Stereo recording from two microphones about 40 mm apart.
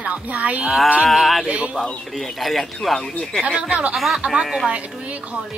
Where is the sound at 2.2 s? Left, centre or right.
Centre.